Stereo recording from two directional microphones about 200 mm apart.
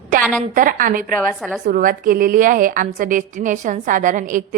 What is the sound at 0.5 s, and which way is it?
A woman's voice, 40° right (ahead or behind).